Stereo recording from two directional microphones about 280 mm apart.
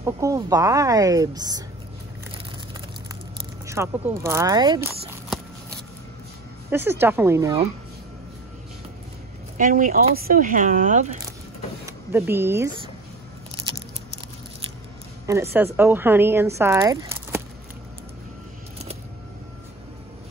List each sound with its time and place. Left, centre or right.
0.0 s speech: centre
3.3 s speech: centre
6.7 s speech: centre
9.6 s speech: right
11.8 s speech: centre
15.5 s speech: centre